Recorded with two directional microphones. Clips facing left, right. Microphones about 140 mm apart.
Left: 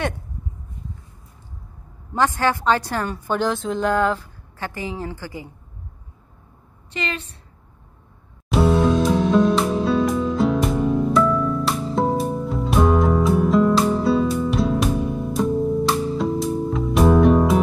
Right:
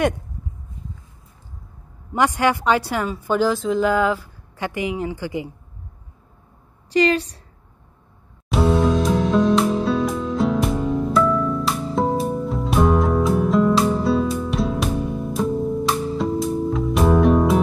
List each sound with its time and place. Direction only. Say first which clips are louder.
2.1 s speech: right 1 dB; 15° right (ahead or behind)
6.9 s a woman's voice: right 11 dB; 35° right (ahead or behind)
8.5 s music: left 1 dB; centre (ahead or behind)